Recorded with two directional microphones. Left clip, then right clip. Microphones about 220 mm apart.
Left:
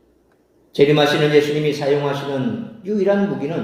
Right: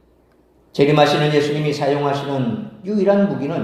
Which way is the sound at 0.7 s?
20° right (ahead or behind).